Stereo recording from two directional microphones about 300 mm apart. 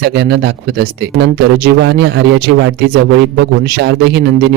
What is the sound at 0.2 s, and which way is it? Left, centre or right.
Speech, right.